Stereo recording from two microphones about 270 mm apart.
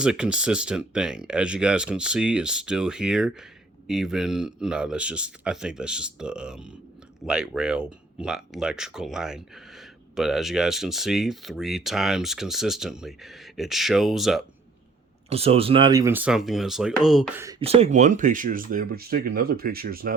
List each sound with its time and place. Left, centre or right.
0.0 s speech: centre
15.3 s speech: right; by 17.4 s centre
17.4 s speech: centre; by 20.1 s right